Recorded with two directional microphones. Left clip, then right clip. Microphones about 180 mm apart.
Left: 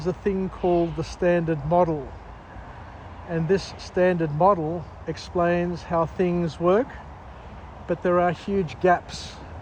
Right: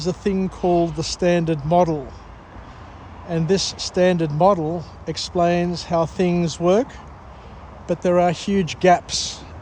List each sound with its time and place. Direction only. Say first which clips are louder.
0.0 s speech: right 3 dB; 40° right (ahead or behind)
3.2 s speech: right 3 dB; 40° right (ahead or behind)
7.9 s speech: right 4 dB; 40° right (ahead or behind)